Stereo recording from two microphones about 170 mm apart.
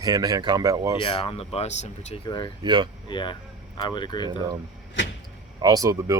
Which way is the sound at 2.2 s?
25° left (ahead or behind).